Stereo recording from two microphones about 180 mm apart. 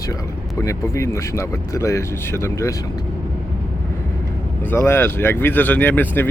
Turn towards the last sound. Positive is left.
turn(degrees=10)  # may be behind; listen again after turning